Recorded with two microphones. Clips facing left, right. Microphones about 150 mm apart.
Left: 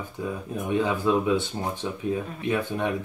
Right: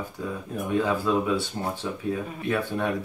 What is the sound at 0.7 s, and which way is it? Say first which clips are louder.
Speech: left 1 dB; 20° left (ahead or behind).